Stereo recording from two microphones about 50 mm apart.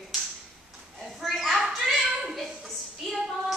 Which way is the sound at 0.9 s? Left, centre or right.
Centre.